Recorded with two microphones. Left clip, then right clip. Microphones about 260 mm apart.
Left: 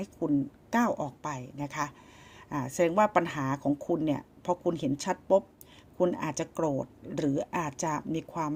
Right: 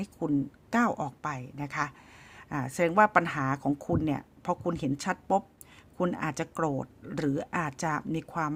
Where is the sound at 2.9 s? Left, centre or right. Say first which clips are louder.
Right 4 dB; right.